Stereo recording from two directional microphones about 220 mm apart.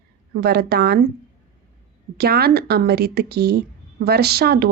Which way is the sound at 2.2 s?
45° right (ahead or behind).